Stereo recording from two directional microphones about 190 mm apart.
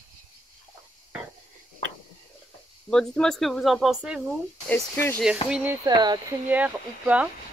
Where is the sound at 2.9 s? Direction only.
5° left (ahead or behind).